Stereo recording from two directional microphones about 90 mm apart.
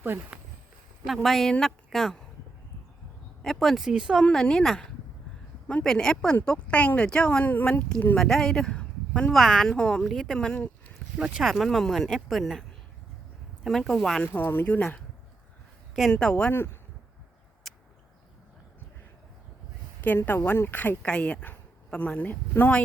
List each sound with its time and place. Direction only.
1.0 s speech: centre (ahead or behind)
3.4 s speech: 5° left (ahead or behind)
4.2 s speech: 5° left (ahead or behind)
8.1 s a man's voice: 5° left (ahead or behind)
9.3 s speech: centre (ahead or behind)
11.2 s speech: 5° right (ahead or behind)
13.7 s speech: 5° left (ahead or behind)
14.3 s speech: 20° left (ahead or behind)
16.1 s speech: 10° left (ahead or behind)
17.7 s a sound: centre (ahead or behind)
20.0 s speech: 20° left (ahead or behind)